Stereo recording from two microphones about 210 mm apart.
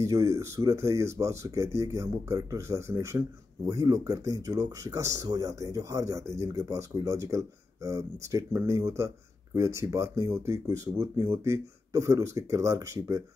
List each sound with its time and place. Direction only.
0.0 s speech: 15° right (ahead or behind)